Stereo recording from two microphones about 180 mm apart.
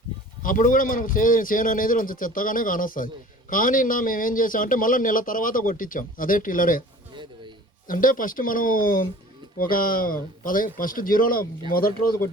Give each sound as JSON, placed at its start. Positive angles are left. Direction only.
{"t": 0.4, "sound": "a man's voice", "side_deg": 50}
{"t": 7.1, "sound": "a sound", "side_deg": -25}
{"t": 7.9, "sound": "a man's voice", "side_deg": 50}